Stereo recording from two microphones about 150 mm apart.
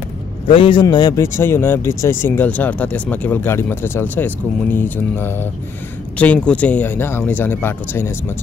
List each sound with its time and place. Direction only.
0.5 s speech: 35° left (ahead or behind); by 8.1 s 15° left (ahead or behind)